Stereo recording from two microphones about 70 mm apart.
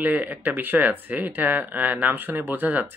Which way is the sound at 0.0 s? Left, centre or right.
Right.